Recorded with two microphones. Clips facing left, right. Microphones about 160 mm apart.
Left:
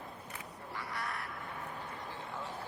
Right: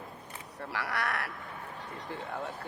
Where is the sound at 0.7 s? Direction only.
80° right.